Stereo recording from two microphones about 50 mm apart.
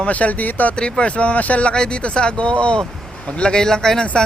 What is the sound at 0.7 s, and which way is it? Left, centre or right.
Speech, centre.